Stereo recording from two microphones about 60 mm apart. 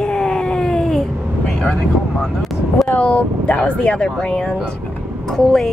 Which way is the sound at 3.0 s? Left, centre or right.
Left.